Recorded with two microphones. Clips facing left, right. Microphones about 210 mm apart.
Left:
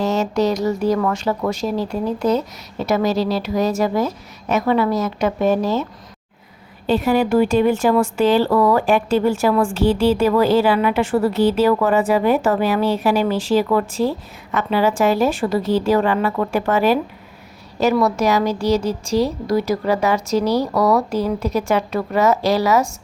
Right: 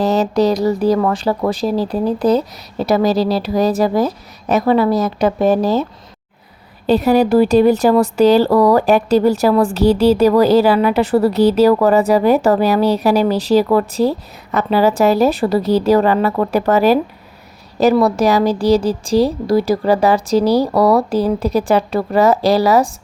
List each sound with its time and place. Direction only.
0.0 s speech: 35° right (ahead or behind)
6.8 s speech: 40° right (ahead or behind)